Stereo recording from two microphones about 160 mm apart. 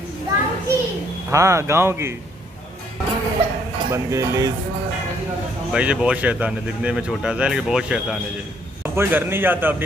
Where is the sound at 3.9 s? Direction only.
20° right (ahead or behind).